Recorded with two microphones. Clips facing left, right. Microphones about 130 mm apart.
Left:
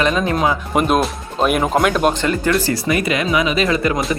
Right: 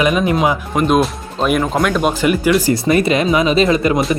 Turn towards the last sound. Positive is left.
turn(degrees=-20)  # may be behind; listen again after turning